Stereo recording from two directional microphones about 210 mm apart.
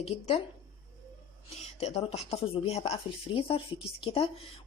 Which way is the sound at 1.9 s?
30° left (ahead or behind).